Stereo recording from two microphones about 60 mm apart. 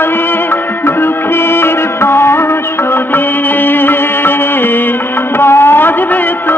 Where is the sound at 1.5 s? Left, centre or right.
Left.